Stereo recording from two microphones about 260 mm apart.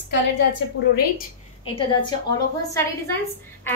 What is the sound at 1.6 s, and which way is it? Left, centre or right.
Speech, centre.